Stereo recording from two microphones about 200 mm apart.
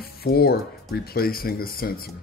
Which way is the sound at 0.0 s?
50° left (ahead or behind).